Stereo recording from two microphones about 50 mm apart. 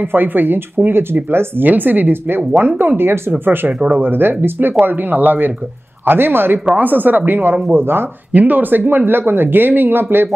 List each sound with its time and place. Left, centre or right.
0.1 s speech: right
1.7 s speech: right
6.0 s speech: right
7.7 s speech: right
8.3 s speech: right